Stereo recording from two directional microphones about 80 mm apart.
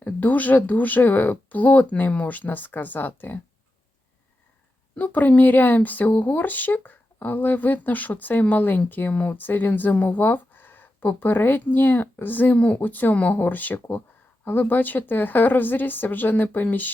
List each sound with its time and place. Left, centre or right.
0.0 s speech: centre
4.9 s speech: left